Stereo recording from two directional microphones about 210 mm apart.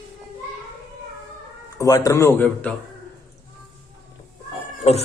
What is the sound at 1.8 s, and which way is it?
Speech, 15° left (ahead or behind).